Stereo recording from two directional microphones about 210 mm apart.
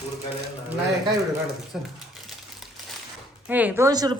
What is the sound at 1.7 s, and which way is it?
Speech, 5° right (ahead or behind).